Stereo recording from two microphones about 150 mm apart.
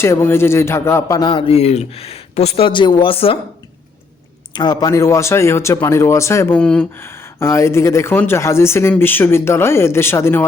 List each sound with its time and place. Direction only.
0.0 s speech: 15° left (ahead or behind); by 3.3 s 40° left (ahead or behind)
4.5 s speech: 30° left (ahead or behind)
6.6 s speech: 5° left (ahead or behind)
7.0 s speech: 15° left (ahead or behind)